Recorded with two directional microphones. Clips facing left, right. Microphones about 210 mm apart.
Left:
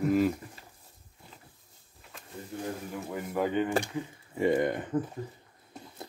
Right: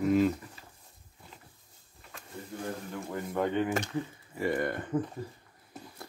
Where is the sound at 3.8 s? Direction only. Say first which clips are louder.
Right 1 dB; 15° left (ahead or behind).